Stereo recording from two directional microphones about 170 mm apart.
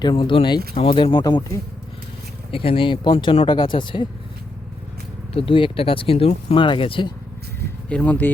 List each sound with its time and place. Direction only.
0.0 s speech: 25° left (ahead or behind)
2.5 s speech: 30° left (ahead or behind)
5.3 s speech: 30° left (ahead or behind)
7.9 s speech: 10° left (ahead or behind)